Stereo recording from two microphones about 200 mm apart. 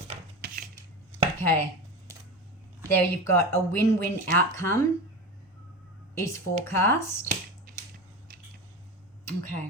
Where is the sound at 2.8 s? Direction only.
10° left (ahead or behind).